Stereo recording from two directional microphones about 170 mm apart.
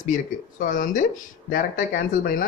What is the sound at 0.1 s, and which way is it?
Speech, 50° left (ahead or behind).